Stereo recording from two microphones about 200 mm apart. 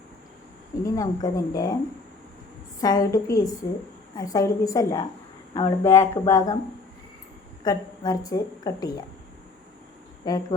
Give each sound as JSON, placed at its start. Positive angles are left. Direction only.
{"t": 0.9, "sound": "a woman's voice", "side_deg": 15}
{"t": 2.8, "sound": "a woman's voice", "side_deg": 20}
{"t": 7.6, "sound": "a woman's voice", "side_deg": 20}
{"t": 10.3, "sound": "speech", "side_deg": 20}